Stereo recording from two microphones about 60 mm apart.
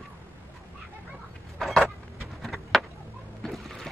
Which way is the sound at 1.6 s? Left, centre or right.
Centre.